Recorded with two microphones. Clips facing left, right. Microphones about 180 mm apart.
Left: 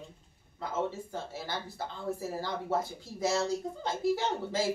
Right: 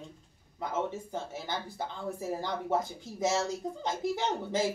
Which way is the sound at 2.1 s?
20° right (ahead or behind).